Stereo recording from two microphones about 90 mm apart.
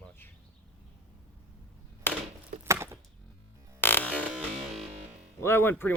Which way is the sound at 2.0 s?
25° left (ahead or behind).